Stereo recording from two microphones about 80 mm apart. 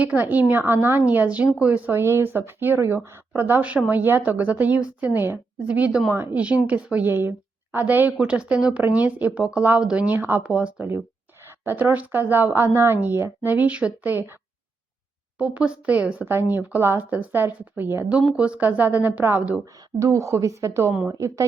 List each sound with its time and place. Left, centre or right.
0.0 s a woman's voice: centre
1.9 s a woman's voice: right
15.4 s a woman's voice: centre
18.3 s a woman's voice: centre
20.0 s a woman's voice: right